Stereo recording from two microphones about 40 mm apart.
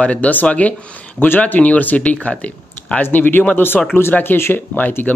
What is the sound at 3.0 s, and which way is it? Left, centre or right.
Speech, left.